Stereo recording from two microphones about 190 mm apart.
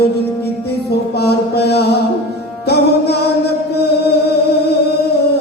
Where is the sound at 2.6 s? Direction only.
60° left (ahead or behind).